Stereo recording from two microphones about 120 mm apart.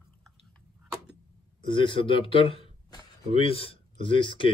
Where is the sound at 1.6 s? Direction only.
45° left (ahead or behind).